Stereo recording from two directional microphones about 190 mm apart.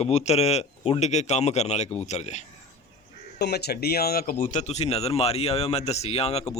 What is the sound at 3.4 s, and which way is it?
Speech, 60° left (ahead or behind).